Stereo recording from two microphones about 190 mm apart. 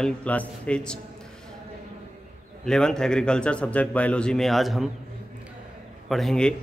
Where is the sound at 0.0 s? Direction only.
5° left (ahead or behind).